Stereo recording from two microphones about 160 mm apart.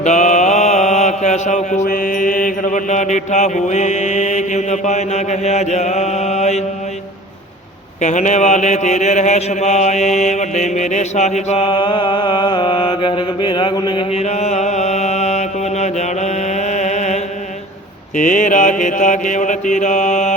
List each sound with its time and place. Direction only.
0.0 s mantra: 45° left (ahead or behind)
8.0 s mantra: 50° left (ahead or behind); by 14.0 s 30° left (ahead or behind)
14.1 s mantra: 45° left (ahead or behind)
18.2 s mantra: 50° left (ahead or behind)